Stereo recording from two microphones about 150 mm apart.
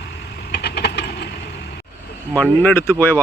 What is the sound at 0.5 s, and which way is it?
Vehicle, 90° left.